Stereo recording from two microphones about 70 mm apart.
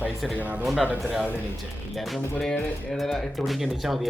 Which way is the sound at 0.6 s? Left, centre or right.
Centre.